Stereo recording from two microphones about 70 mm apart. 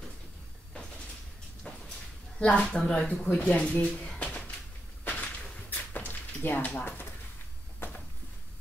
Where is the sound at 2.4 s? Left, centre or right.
Centre.